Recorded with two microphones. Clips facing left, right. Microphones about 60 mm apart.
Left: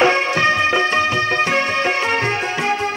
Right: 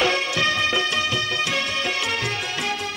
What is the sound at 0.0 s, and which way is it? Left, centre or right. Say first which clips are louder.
Music: left 6 dB; left.